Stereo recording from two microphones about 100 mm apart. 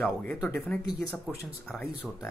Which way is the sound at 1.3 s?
Centre (ahead or behind).